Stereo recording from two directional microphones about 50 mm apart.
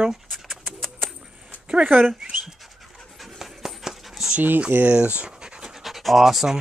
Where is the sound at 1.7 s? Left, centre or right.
Right.